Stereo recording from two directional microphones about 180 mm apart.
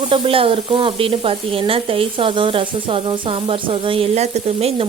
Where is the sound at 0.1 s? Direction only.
30° right (ahead or behind).